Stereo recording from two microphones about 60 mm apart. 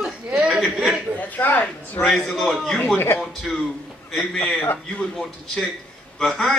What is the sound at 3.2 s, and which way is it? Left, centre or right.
A man's voice, centre.